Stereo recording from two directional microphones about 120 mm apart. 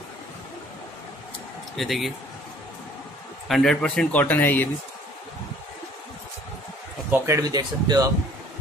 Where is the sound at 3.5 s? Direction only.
5° left (ahead or behind).